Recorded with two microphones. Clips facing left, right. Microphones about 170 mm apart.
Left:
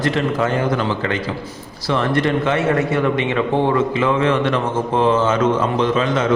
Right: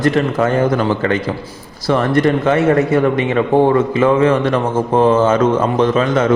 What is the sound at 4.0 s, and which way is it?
A man's voice, 45° right (ahead or behind).